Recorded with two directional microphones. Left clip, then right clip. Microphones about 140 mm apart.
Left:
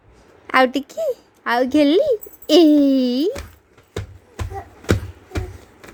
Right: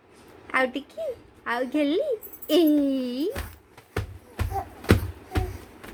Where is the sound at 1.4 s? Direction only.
75° left (ahead or behind).